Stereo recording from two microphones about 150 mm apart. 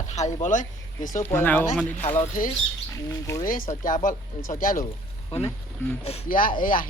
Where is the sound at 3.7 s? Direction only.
60° left (ahead or behind).